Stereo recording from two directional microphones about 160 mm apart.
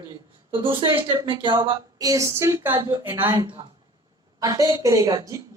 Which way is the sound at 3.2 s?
30° right (ahead or behind).